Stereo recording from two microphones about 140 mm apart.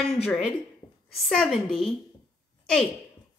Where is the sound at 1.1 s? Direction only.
Centre (ahead or behind).